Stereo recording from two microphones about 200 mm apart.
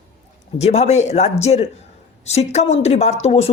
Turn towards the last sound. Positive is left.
turn(degrees=30)  # may be behind; listen again after turning